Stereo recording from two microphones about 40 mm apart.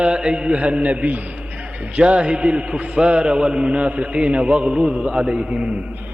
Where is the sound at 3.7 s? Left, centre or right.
Right.